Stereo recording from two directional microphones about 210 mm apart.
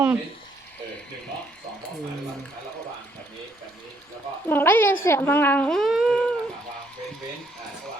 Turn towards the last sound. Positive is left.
turn(degrees=0)  # may be behind; listen again after turning